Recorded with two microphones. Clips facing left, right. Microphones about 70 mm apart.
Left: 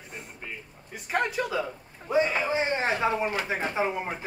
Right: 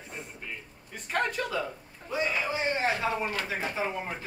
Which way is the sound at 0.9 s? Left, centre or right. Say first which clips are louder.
Left 2 dB; centre.